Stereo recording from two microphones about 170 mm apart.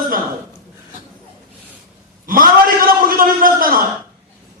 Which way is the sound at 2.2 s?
55° right (ahead or behind).